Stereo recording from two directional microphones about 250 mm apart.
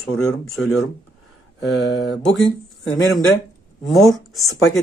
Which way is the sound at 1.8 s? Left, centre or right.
Left.